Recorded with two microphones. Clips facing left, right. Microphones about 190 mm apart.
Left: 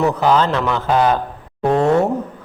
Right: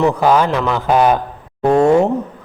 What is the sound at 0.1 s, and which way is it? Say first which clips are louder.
A man's voice: right 2 dB; 10° right (ahead or behind).